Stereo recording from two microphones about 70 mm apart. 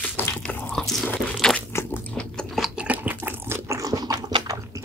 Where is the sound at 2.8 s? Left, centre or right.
Right.